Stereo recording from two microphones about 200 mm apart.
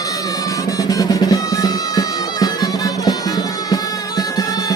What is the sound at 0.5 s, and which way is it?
Music, 15° left (ahead or behind).